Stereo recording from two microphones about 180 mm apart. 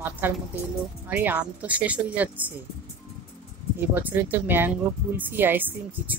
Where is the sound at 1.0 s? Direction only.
10° right (ahead or behind).